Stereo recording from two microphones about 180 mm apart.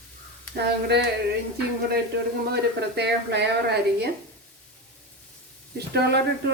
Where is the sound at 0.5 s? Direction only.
70° right (ahead or behind).